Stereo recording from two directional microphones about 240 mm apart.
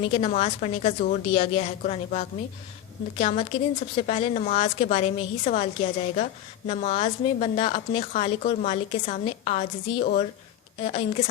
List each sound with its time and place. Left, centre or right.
0.0 s a woman's voice: left